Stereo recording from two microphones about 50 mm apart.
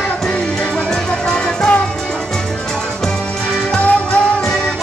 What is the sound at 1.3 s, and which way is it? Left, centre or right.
Music, centre.